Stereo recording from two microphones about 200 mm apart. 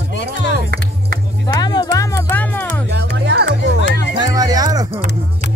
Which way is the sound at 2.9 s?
60° right (ahead or behind).